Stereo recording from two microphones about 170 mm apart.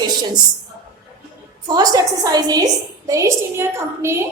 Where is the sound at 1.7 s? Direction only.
20° right (ahead or behind).